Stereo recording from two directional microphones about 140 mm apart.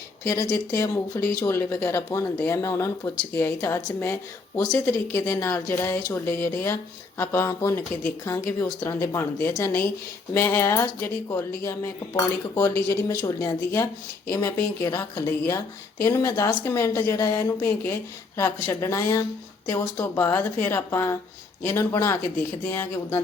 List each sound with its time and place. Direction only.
0.3 s a woman's voice: 20° left (ahead or behind)